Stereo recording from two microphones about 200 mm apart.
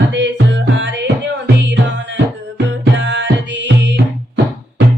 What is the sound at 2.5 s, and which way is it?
Music, 65° right (ahead or behind).